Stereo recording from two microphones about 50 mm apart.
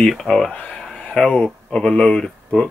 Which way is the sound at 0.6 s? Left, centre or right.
Left.